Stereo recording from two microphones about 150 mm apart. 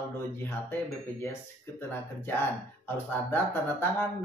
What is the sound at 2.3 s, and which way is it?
Speech, 15° left (ahead or behind).